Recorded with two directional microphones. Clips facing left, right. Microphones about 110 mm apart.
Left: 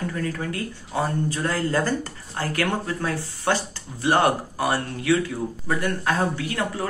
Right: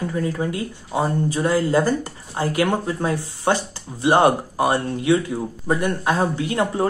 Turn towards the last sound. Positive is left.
turn(degrees=-25)  # may be behind; listen again after turning